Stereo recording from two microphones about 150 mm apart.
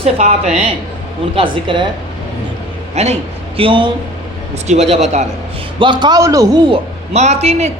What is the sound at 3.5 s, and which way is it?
Speech, 35° right (ahead or behind).